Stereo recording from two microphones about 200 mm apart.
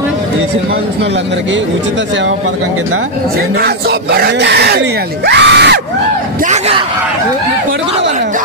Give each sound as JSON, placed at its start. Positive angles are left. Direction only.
{"t": 3.5, "sound": "speech", "side_deg": -55}
{"t": 6.4, "sound": "speech", "side_deg": -35}